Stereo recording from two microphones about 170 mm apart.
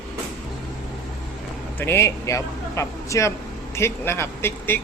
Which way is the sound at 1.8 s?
15° left (ahead or behind).